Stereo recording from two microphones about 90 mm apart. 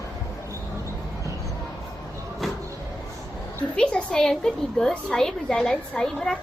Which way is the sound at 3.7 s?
10° left (ahead or behind).